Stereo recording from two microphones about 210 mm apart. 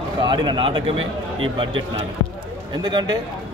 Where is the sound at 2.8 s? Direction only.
20° right (ahead or behind).